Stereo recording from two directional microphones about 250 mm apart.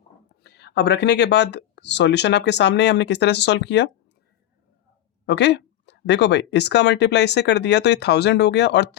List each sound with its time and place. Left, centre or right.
0.4 s speech: left
5.2 s speech: left